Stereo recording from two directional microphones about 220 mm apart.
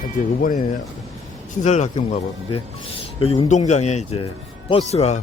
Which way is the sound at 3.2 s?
25° left (ahead or behind).